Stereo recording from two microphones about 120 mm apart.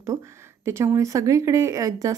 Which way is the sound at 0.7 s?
25° right (ahead or behind).